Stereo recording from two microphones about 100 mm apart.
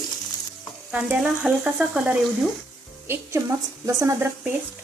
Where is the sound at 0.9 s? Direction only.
15° right (ahead or behind).